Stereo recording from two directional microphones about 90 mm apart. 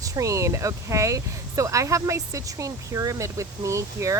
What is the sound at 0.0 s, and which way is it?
Speech, 40° right (ahead or behind).